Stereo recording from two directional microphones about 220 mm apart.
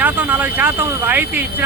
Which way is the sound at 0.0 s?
10° right (ahead or behind).